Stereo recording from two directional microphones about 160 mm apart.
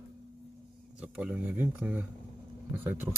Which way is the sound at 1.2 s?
5° right (ahead or behind).